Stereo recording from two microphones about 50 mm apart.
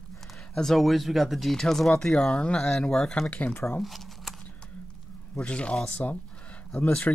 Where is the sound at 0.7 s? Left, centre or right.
Centre.